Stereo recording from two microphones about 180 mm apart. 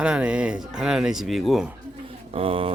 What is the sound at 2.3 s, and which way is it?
Speech, 30° right (ahead or behind).